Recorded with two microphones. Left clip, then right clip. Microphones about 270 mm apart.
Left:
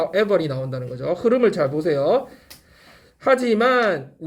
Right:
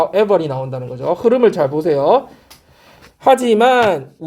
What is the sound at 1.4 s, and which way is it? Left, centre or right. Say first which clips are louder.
Speech: right 5 dB; right.